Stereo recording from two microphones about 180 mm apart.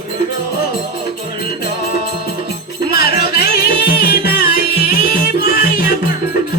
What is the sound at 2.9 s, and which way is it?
Music, 60° left (ahead or behind).